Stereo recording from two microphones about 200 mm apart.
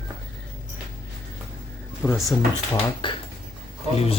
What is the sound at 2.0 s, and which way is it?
Speech, 15° left (ahead or behind).